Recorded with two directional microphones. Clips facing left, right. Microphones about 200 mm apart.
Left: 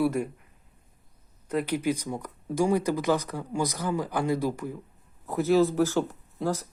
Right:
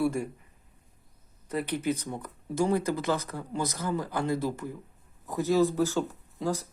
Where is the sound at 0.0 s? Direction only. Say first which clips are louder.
Left 2 dB; 10° left (ahead or behind).